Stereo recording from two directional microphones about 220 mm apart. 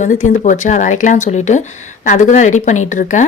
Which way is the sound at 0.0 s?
35° left (ahead or behind).